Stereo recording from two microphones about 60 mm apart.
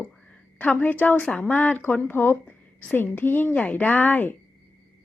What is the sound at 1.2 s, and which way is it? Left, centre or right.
A woman's voice, left.